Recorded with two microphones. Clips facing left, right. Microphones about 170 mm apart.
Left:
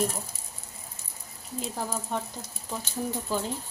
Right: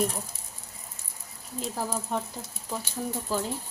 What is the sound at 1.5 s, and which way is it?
Speech, centre (ahead or behind).